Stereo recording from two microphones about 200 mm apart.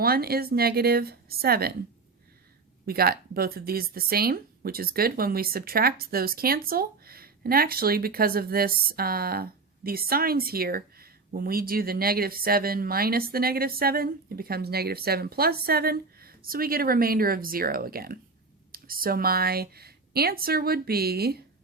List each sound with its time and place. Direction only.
0.0 s speech: 50° right (ahead or behind)
2.8 s speech: 50° right (ahead or behind)